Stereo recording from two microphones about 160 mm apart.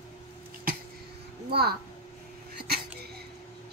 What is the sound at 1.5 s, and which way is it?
Speech, 85° right.